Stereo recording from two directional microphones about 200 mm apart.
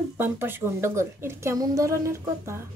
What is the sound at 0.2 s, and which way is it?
Speech, 10° right (ahead or behind).